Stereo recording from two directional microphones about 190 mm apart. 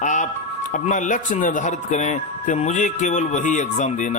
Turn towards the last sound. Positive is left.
turn(degrees=40)  # may be behind; listen again after turning